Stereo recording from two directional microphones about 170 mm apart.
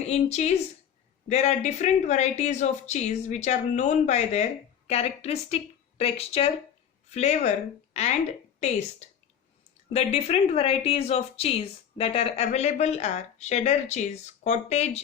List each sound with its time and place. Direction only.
0.0 s a woman's voice: 40° left (ahead or behind)
9.9 s speech: 40° left (ahead or behind)